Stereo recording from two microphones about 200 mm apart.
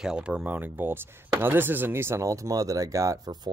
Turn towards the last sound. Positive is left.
turn(degrees=-20)  # may be behind; listen again after turning